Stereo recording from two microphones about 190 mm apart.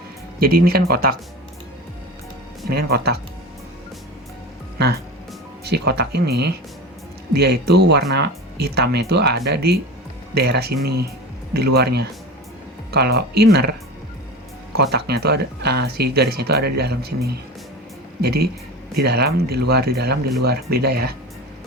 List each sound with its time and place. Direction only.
0.3 s speech: 50° right (ahead or behind)
2.6 s speech: 55° right (ahead or behind)
5.6 s speech: 60° right (ahead or behind)
14.8 s speech: 60° right (ahead or behind)
18.2 s speech: 55° right (ahead or behind)